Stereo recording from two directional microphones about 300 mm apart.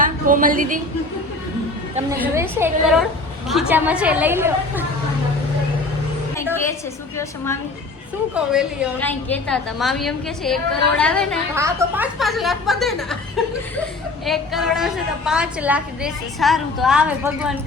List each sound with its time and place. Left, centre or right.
0.0 s a woman's voice: right
2.1 s a woman's voice: centre
7.2 s a woman's voice: centre
8.4 s a woman's voice: centre
14.3 s a woman's voice: centre